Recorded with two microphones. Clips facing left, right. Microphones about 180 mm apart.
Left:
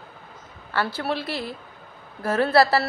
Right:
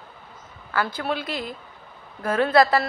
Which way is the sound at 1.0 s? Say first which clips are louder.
Even; 30° left (ahead or behind).